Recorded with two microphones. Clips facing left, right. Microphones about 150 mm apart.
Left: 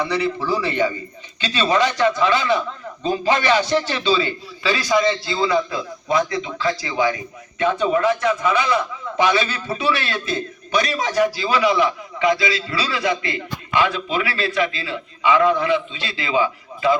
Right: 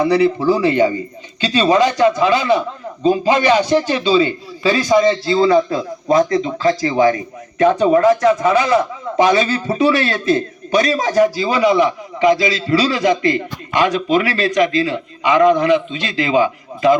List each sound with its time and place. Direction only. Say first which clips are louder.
0.0 s a man's voice: right 8 dB; 40° right (ahead or behind)
3.1 s a man's voice: right 5 dB; 15° right (ahead or behind)
4.6 s a man's voice: right 6 dB; 35° right (ahead or behind)